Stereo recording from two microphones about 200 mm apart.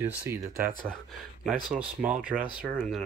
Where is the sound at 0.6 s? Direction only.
45° right (ahead or behind).